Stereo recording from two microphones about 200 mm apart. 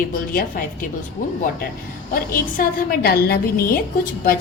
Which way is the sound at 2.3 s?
45° left (ahead or behind).